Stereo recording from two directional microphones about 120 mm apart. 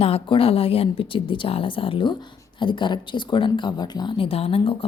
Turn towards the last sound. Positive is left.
turn(degrees=50)  # may be behind; listen again after turning